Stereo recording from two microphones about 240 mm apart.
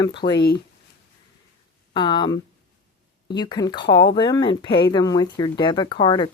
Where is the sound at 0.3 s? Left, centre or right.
Left.